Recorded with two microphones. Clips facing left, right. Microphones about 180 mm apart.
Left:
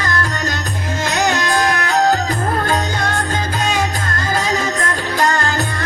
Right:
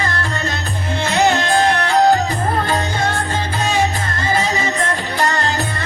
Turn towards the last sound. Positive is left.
turn(degrees=45)  # may be behind; listen again after turning